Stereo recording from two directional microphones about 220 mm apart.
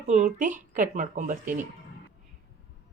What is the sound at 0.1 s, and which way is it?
Speech, 35° right (ahead or behind).